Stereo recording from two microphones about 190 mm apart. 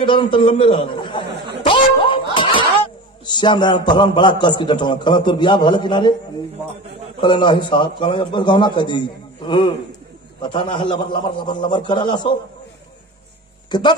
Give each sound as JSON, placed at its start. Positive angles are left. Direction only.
{"t": 0.0, "sound": "a man's voice", "side_deg": 25}
{"t": 1.6, "sound": "a sound", "side_deg": 25}
{"t": 3.3, "sound": "a man's voice", "side_deg": 25}
{"t": 7.2, "sound": "a man's voice", "side_deg": 25}
{"t": 13.7, "sound": "speech", "side_deg": 25}